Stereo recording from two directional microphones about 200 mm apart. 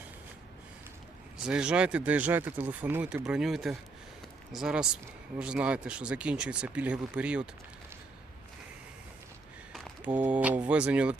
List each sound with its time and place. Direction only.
1.5 s speech: 5° right (ahead or behind)
9.7 s speech: 5° right (ahead or behind)